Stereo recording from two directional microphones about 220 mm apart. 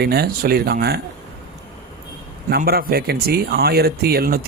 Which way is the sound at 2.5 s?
45° right (ahead or behind).